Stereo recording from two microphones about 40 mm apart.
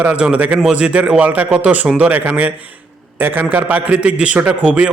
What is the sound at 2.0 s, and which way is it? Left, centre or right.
Speech, right.